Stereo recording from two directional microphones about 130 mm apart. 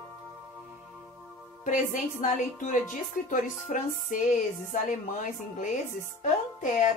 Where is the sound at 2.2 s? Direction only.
75° left (ahead or behind).